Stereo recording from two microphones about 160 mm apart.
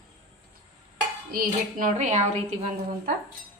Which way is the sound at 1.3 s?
55° right (ahead or behind).